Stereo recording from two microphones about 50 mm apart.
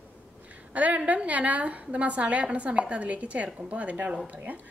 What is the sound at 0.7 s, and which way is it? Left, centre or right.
A woman's voice, right.